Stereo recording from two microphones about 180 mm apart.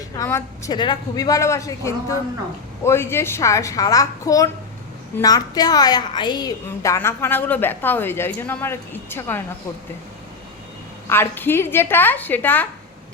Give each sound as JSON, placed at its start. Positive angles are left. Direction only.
{"t": 0.2, "sound": "a woman's voice", "side_deg": 15}
{"t": 11.1, "sound": "a woman's voice", "side_deg": 10}